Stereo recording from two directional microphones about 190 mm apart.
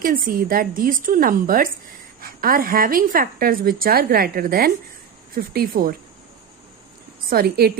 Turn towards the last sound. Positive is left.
turn(degrees=-55)  # may be behind; listen again after turning